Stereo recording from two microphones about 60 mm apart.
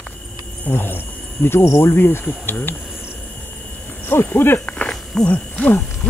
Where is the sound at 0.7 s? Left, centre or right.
Left.